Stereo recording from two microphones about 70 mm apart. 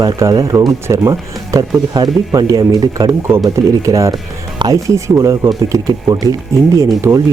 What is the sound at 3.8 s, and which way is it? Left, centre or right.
Speech, right.